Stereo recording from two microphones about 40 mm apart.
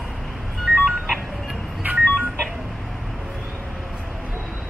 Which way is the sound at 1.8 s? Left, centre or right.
Right.